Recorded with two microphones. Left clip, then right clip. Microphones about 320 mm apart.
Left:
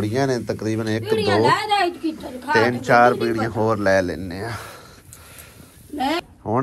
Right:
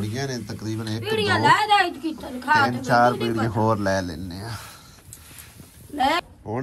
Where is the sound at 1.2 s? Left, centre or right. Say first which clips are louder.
Even; centre.